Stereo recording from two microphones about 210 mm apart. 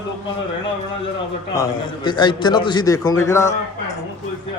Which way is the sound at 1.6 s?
20° left (ahead or behind).